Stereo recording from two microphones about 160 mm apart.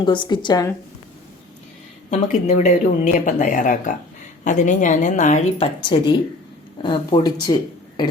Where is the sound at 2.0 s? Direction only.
45° left (ahead or behind).